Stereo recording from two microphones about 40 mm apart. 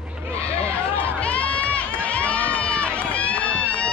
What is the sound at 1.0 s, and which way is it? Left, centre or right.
Run, left.